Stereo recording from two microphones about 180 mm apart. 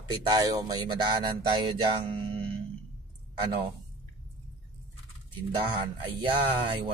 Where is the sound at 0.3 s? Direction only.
20° right (ahead or behind).